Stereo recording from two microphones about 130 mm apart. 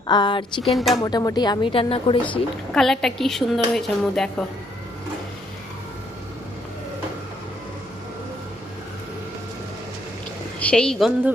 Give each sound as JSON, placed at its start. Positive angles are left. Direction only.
{"t": 0.1, "sound": "a woman's voice", "side_deg": 35}
{"t": 0.6, "sound": "a woman's voice", "side_deg": 0}
{"t": 1.0, "sound": "a woman's voice", "side_deg": 30}
{"t": 2.2, "sound": "a woman's voice", "side_deg": 5}
{"t": 10.6, "sound": "a woman's voice", "side_deg": 5}